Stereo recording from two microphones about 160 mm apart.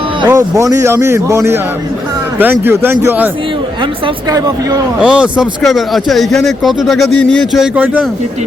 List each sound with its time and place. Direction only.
0.2 s a man's voice: 25° right (ahead or behind)
4.3 s a man's voice: 20° right (ahead or behind)
4.9 s speech: 5° right (ahead or behind)